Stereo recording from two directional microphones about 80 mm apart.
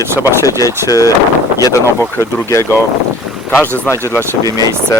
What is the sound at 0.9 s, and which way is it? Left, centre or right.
Speech, left.